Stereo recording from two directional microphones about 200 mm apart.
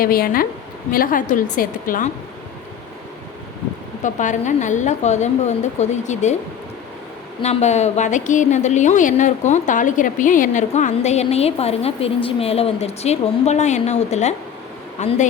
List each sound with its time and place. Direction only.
0.0 s a woman's voice: 45° left (ahead or behind)
4.0 s a woman's voice: 40° left (ahead or behind)
7.4 s a woman's voice: 35° left (ahead or behind)